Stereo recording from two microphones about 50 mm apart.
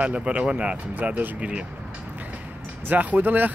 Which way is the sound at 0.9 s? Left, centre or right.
Right.